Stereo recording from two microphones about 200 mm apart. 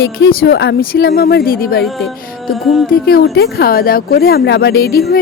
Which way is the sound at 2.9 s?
50° left (ahead or behind).